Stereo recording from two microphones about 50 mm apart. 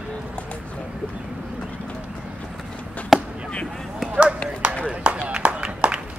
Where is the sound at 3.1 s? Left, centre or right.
Centre.